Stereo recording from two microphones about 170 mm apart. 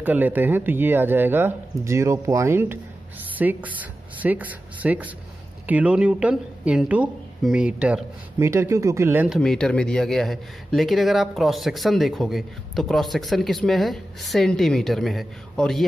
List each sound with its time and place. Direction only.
0.0 s speech: 10° right (ahead or behind)
9.4 s speech: 5° left (ahead or behind)